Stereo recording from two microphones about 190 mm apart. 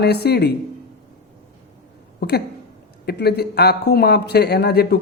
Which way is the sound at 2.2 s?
55° left (ahead or behind).